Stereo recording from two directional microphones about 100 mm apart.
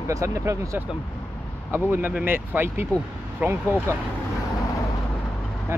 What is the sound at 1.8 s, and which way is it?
Speech, 20° right (ahead or behind).